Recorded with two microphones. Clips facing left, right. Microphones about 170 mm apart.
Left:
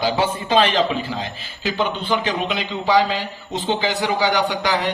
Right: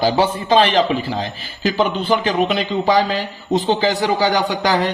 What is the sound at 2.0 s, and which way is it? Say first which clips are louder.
Speech: right 5 dB; 40° right (ahead or behind).